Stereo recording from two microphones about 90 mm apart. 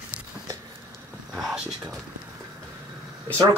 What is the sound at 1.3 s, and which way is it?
Speech, 5° right (ahead or behind).